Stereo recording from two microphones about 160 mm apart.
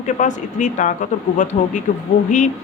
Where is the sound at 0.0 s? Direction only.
50° left (ahead or behind).